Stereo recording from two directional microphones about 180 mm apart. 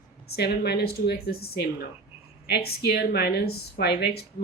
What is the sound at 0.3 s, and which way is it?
Speech, 65° left (ahead or behind).